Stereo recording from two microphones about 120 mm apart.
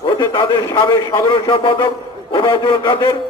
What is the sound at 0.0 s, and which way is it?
A man's voice, 40° left (ahead or behind).